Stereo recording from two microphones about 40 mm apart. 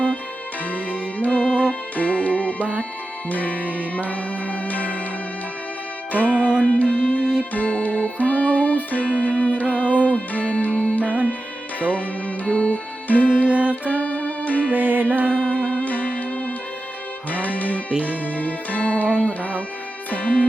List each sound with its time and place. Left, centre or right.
0.7 s music: left
3.6 s music: right
3.9 s music: left
6.1 s music: left
13.5 s music: right
13.9 s music: left
14.7 s music: right
15.3 s music: left
15.6 s music: left